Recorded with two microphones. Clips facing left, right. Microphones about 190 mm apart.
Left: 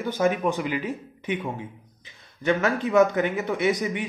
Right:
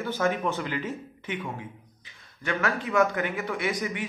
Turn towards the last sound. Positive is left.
turn(degrees=20)  # may be behind; listen again after turning